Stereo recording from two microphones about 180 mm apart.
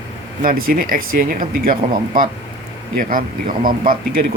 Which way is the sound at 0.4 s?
50° right (ahead or behind).